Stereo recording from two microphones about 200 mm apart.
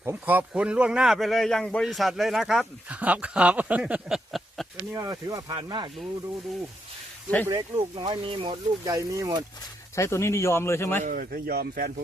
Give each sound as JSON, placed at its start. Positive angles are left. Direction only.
{"t": 0.0, "sound": "speech", "side_deg": -10}
{"t": 4.9, "sound": "speech", "side_deg": -15}
{"t": 7.4, "sound": "speech", "side_deg": -20}
{"t": 9.9, "sound": "speech", "side_deg": 15}
{"t": 11.0, "sound": "speech", "side_deg": -45}